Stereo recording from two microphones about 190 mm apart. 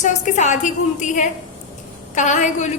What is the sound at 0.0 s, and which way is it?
A woman's voice, 40° left (ahead or behind).